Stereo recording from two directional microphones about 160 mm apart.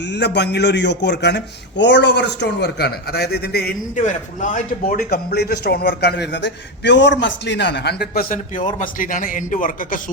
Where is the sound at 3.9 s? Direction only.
50° left (ahead or behind).